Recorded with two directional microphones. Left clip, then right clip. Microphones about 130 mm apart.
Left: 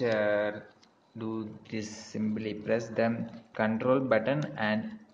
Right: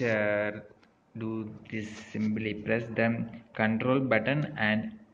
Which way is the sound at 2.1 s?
20° left (ahead or behind).